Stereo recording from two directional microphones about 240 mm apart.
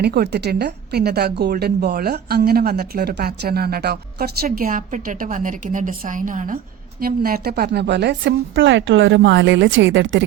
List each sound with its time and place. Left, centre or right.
0.0 s a woman's voice: right